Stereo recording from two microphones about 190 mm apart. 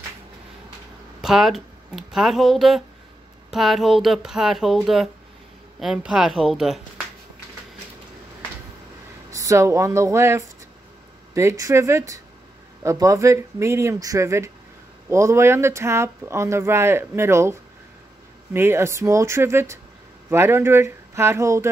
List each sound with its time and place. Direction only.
1.2 s speech: centre (ahead or behind)
9.3 s speech: 15° right (ahead or behind)